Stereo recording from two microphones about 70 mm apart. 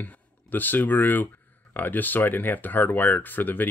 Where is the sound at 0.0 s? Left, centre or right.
Left.